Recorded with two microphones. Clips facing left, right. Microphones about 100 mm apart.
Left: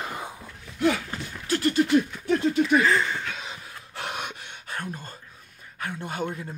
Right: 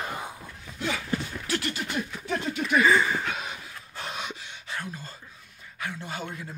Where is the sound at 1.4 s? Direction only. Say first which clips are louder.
Left 6 dB; 40° left (ahead or behind).